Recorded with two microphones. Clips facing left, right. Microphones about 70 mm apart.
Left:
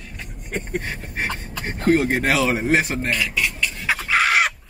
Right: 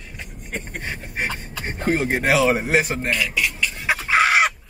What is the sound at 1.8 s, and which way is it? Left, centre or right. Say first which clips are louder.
Speech: left 3 dB; centre.